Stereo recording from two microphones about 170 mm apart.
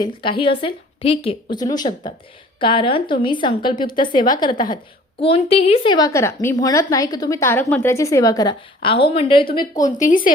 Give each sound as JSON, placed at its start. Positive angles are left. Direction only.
{"t": 0.0, "sound": "a woman's voice", "side_deg": 30}
{"t": 10.0, "sound": "a woman's voice", "side_deg": 50}